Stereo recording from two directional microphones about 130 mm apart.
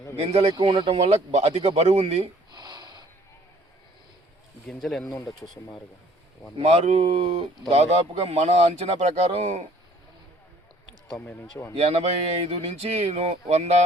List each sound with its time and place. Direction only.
0.2 s speech: 55° right (ahead or behind)
0.5 s speech: 35° right (ahead or behind)
0.9 s a man's voice: 60° right (ahead or behind)
2.5 s a sound: 35° right (ahead or behind)
4.6 s speech: 5° left (ahead or behind)
5.2 s speech: 25° left (ahead or behind)
6.6 s a man's voice: 50° right (ahead or behind)
11.3 s speech: 20° left (ahead or behind)
11.7 s a man's voice: 55° right (ahead or behind)